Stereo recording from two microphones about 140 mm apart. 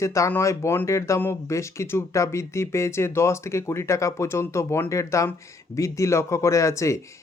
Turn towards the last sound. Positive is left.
turn(degrees=20)  # may be behind; listen again after turning